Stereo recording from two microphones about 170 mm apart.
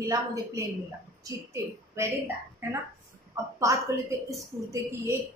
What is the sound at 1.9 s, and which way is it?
Speech, 15° right (ahead or behind).